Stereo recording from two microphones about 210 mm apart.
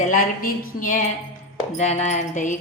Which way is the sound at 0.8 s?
40° left (ahead or behind).